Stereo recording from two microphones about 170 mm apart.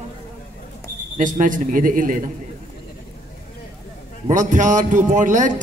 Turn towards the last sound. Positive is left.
turn(degrees=-50)  # may be behind; listen again after turning